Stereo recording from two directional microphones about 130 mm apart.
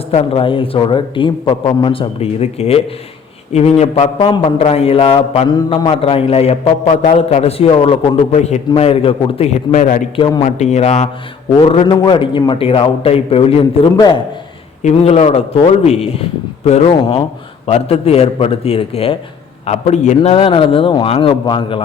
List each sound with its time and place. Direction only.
0.1 s a man's voice: 50° left (ahead or behind)
9.7 s a man's voice: 80° left
10.2 s a man's voice: 35° left (ahead or behind)
10.4 s a man's voice: 55° left (ahead or behind)
11.6 s a man's voice: 45° left (ahead or behind)
13.9 s a man's voice: 35° left (ahead or behind)
14.8 s a man's voice: 55° left (ahead or behind); by 21.8 s 40° left (ahead or behind)